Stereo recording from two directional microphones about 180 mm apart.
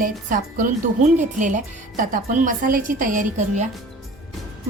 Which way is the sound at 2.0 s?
45° right (ahead or behind).